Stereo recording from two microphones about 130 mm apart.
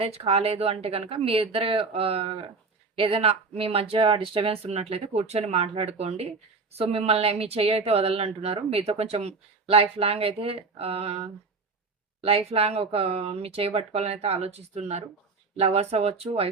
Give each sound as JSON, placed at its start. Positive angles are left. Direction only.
{"t": 0.0, "sound": "speech", "side_deg": -50}